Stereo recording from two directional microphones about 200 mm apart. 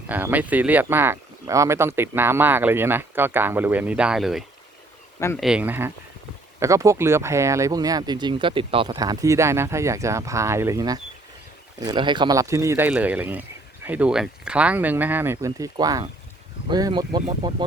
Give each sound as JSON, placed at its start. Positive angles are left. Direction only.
{"t": 0.1, "sound": "speech", "side_deg": -10}